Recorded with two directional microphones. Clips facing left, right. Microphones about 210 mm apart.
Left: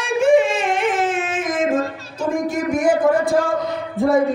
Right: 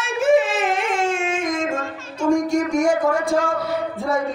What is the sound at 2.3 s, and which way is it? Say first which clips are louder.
A man's voice: right 2 dB; 5° left (ahead or behind).